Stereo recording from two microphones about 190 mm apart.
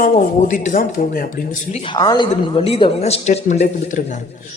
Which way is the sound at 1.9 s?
20° left (ahead or behind).